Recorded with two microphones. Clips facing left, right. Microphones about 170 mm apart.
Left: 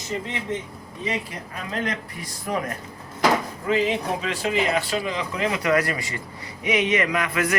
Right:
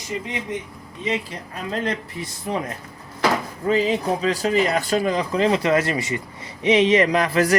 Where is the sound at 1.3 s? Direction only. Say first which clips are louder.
Right 3 dB; 30° right (ahead or behind).